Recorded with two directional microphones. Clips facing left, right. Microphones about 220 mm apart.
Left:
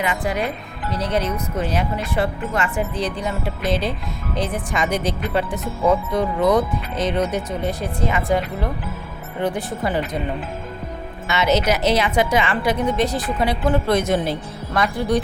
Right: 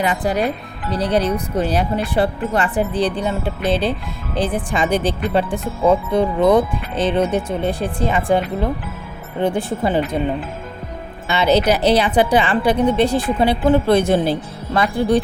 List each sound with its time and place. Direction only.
0.0 s a woman's voice: 35° right (ahead or behind)
11.3 s a woman's voice: 30° right (ahead or behind)